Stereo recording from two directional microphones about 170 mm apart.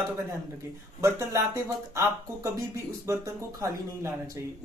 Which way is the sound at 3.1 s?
15° right (ahead or behind).